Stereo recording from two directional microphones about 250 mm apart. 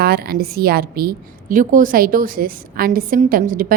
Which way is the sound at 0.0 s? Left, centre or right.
Right.